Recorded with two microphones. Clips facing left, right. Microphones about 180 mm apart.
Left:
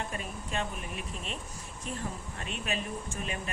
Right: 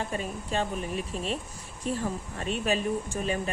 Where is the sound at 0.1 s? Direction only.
35° right (ahead or behind).